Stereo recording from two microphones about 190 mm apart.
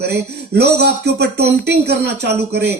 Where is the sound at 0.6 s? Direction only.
60° right (ahead or behind).